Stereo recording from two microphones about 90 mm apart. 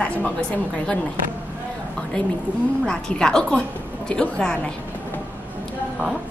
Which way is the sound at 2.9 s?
10° left (ahead or behind).